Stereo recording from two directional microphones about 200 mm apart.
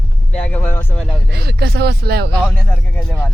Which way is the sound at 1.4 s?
55° right (ahead or behind).